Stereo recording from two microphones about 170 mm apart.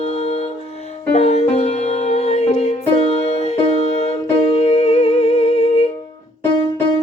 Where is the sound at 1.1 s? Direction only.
40° left (ahead or behind).